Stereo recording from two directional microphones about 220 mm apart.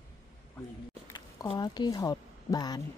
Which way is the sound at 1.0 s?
20° left (ahead or behind).